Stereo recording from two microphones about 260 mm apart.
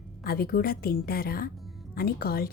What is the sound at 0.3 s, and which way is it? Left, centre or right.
Speech, left.